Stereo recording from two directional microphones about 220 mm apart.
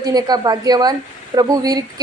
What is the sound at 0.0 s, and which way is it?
A woman's voice, 15° right (ahead or behind).